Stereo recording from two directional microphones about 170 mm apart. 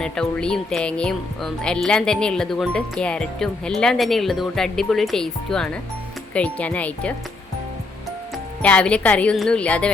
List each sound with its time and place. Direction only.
0.0 s a woman's voice: 5° left (ahead or behind)
8.6 s a woman's voice: 5° left (ahead or behind)